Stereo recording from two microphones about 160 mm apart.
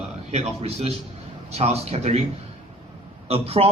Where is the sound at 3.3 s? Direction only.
40° right (ahead or behind).